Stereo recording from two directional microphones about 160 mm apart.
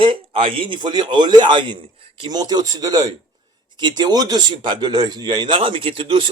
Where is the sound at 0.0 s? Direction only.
30° right (ahead or behind).